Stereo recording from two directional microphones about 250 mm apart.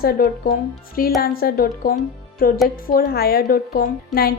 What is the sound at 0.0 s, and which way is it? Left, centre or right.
A woman's voice, left.